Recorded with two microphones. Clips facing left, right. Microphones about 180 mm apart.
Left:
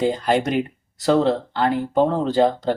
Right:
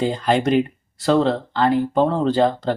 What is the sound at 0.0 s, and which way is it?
Speech, 15° left (ahead or behind).